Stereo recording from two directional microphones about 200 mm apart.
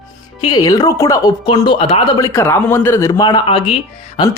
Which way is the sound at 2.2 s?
15° left (ahead or behind).